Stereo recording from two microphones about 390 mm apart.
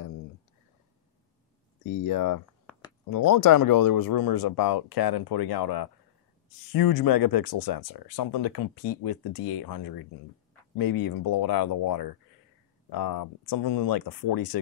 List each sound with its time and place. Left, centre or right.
2.0 s speech: left